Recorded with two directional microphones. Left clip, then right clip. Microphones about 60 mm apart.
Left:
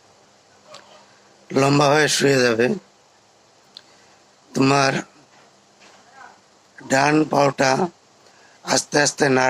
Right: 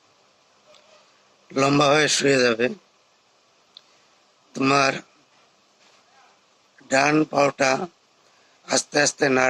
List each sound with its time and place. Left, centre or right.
1.5 s a man's voice: right
4.5 s a man's voice: right
6.7 s a man's voice: right